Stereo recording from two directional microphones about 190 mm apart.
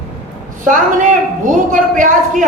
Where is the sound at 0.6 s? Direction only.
40° right (ahead or behind).